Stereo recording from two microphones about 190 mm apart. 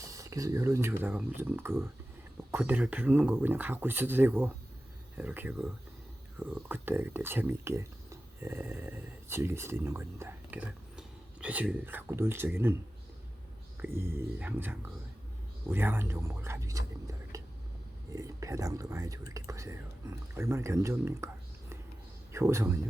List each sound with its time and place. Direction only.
0.0 s speech: 15° right (ahead or behind)
13.8 s speech: 15° right (ahead or behind)
22.3 s a man's voice: 15° right (ahead or behind)